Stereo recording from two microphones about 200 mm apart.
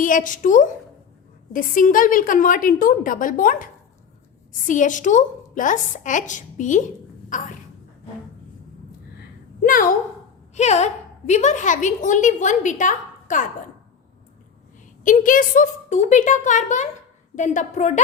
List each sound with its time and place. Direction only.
0.0 s a woman's voice: 40° left (ahead or behind)
9.6 s a woman's voice: 40° left (ahead or behind)
12.8 s a sound: 40° left (ahead or behind)
15.0 s a woman's voice: 40° left (ahead or behind)